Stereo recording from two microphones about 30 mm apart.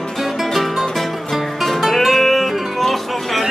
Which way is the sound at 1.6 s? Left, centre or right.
Centre.